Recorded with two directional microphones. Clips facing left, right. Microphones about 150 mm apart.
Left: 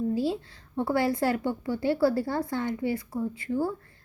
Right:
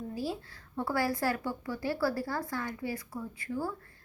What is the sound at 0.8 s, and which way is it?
A woman's voice, 25° left (ahead or behind).